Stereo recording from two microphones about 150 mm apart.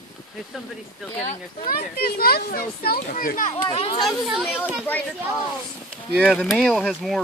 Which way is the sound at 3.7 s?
40° left (ahead or behind).